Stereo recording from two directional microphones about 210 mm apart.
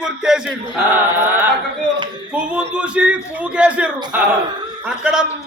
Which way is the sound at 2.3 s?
5° right (ahead or behind).